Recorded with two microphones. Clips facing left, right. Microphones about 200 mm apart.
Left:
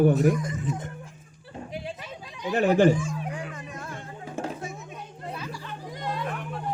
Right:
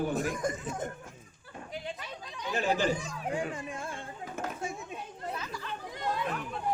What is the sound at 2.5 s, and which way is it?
Speech, 60° left (ahead or behind).